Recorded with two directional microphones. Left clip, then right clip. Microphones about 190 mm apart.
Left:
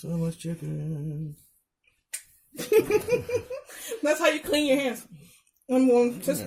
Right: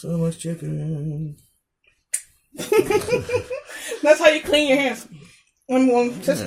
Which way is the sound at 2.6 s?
45° left (ahead or behind).